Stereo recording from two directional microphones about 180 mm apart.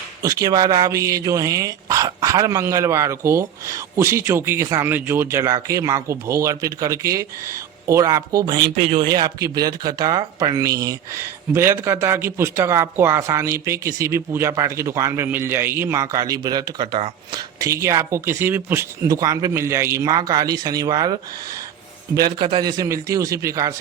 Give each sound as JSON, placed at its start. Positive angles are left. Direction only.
{"t": 0.2, "sound": "a man's voice", "side_deg": -20}